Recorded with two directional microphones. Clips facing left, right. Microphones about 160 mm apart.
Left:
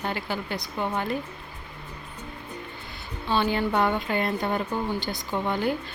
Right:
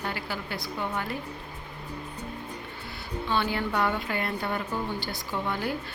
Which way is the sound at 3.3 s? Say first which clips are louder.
Left 4 dB; 25° left (ahead or behind).